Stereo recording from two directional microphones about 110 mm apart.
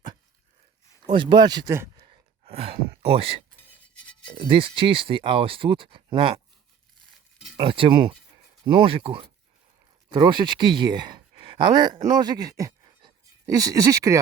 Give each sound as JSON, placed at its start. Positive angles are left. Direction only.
{"t": 1.1, "sound": "speech", "side_deg": -45}
{"t": 2.0, "sound": "a sound", "side_deg": -60}
{"t": 4.4, "sound": "speech", "side_deg": -50}
{"t": 7.5, "sound": "speech", "side_deg": -50}
{"t": 10.1, "sound": "speech", "side_deg": -45}